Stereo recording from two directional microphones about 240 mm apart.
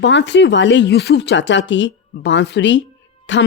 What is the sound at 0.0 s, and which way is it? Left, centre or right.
A woman's voice, left.